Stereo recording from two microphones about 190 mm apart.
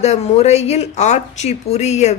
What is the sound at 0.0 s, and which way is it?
Speech, 35° left (ahead or behind).